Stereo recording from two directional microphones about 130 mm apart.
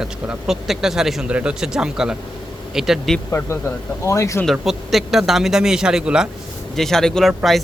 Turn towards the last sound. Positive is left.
turn(degrees=0)  # may be behind; listen again after turning